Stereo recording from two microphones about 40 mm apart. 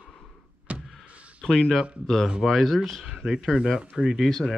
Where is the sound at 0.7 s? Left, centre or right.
Right.